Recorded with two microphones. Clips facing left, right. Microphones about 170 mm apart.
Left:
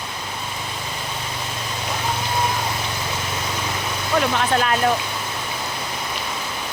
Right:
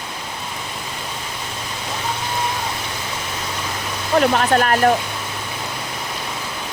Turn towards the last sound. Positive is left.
turn(degrees=-50)  # may be behind; listen again after turning